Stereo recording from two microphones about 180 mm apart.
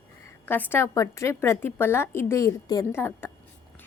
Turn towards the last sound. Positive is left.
turn(degrees=10)  # may be behind; listen again after turning